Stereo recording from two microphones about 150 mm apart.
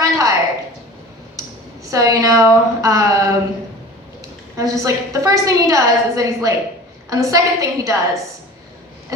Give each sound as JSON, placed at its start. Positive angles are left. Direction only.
{"t": 0.0, "sound": "a sound", "side_deg": -20}
{"t": 1.8, "sound": "a woman's voice", "side_deg": -20}
{"t": 4.5, "sound": "a woman's voice", "side_deg": -20}